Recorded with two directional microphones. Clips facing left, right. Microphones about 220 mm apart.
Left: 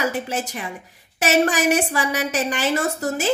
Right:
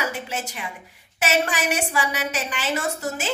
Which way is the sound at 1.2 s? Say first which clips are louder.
Left 5 dB; 45° left (ahead or behind).